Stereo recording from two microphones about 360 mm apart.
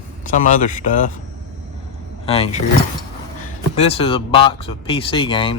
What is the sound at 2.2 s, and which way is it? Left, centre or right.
Speech, centre.